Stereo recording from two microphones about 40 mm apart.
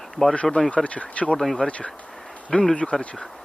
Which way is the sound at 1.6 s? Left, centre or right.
Left.